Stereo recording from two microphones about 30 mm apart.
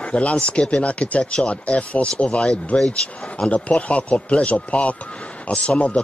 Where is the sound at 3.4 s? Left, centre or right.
Left.